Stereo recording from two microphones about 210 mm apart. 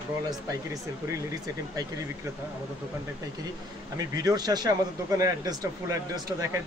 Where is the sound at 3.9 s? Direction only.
15° right (ahead or behind).